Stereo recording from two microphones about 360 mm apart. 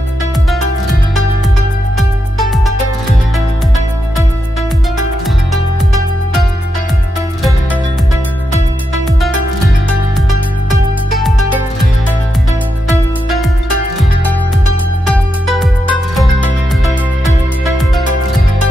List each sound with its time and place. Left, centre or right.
2.0 s music: centre
5.5 s music: centre
10.7 s music: centre
15.0 s music: centre